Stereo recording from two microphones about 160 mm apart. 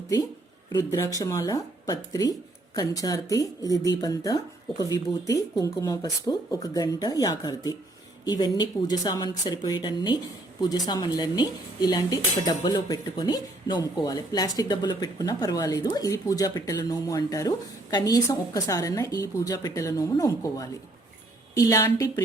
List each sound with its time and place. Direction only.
0.7 s speech: 20° left (ahead or behind)